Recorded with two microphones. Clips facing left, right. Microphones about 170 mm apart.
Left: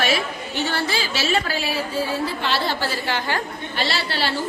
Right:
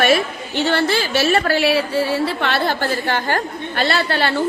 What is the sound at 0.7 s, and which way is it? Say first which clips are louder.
A woman's voice: right 9 dB; 60° right (ahead or behind).